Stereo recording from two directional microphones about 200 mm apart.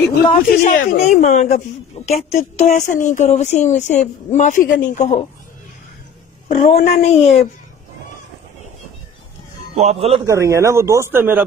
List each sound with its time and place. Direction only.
0.3 s a woman's voice: 40° left (ahead or behind)
6.6 s a woman's voice: 30° left (ahead or behind)
9.8 s speech: 30° right (ahead or behind)
10.2 s speech: 15° right (ahead or behind)